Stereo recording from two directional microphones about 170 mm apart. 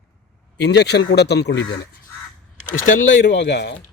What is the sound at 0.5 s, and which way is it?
A man's voice, 80° left.